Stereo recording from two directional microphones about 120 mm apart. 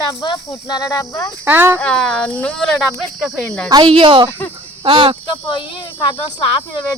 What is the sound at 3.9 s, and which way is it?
Speech, 45° right (ahead or behind).